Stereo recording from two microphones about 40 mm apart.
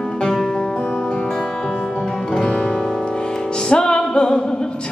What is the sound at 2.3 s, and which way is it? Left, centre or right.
Music, centre.